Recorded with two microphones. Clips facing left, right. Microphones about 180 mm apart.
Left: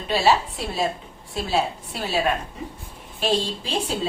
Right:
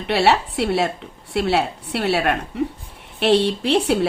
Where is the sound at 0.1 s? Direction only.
70° right (ahead or behind).